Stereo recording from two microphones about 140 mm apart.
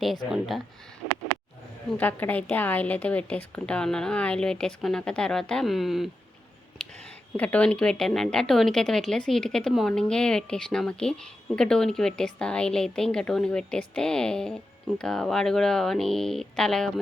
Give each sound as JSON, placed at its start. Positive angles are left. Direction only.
{"t": 0.3, "sound": "a woman's voice", "side_deg": 0}
{"t": 1.0, "sound": "a sound", "side_deg": 40}
{"t": 2.0, "sound": "a woman's voice", "side_deg": 10}
{"t": 7.3, "sound": "a woman's voice", "side_deg": 10}